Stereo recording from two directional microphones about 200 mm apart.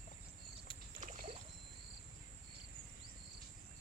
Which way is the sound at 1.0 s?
40° right (ahead or behind).